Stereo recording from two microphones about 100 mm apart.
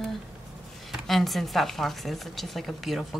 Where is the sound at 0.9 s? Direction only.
Centre (ahead or behind).